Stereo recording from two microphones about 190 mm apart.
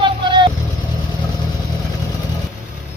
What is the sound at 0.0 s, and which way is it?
Vehicle, 25° right (ahead or behind).